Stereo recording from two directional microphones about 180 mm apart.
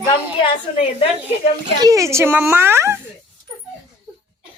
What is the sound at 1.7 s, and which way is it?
A woman's voice, 20° right (ahead or behind).